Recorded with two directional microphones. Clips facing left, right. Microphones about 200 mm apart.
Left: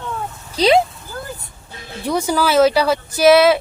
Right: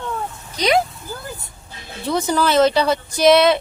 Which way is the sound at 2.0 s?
10° left (ahead or behind).